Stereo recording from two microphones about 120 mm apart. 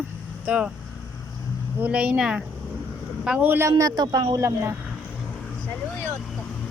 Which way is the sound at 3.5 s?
20° right (ahead or behind).